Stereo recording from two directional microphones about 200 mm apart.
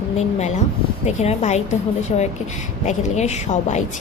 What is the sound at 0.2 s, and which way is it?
Speech, 35° left (ahead or behind).